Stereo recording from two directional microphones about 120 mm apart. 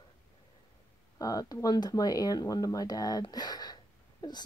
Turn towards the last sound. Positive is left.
turn(degrees=35)  # may be behind; listen again after turning